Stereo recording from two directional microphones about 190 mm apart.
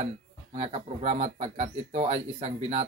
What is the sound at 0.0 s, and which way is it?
Speech, 35° right (ahead or behind).